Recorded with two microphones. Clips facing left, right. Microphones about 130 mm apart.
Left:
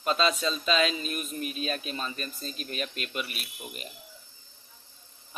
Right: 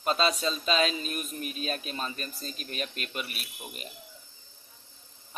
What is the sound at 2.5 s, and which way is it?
Speech, 40° left (ahead or behind).